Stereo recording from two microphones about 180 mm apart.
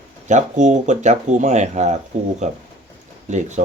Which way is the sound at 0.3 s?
40° right (ahead or behind).